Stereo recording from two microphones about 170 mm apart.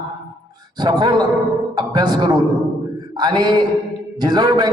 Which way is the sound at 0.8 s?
25° right (ahead or behind).